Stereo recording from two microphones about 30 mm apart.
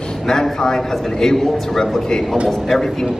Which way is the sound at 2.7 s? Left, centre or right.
Centre.